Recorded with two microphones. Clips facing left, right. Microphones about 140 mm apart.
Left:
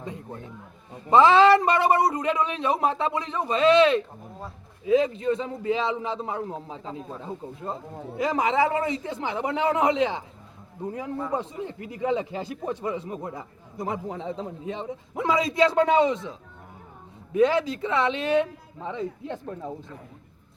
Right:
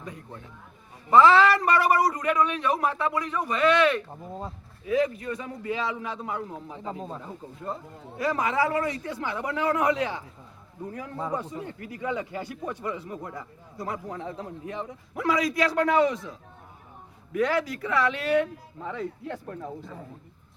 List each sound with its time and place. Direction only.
1.1 s speech: 20° left (ahead or behind)
17.3 s speech: 20° left (ahead or behind)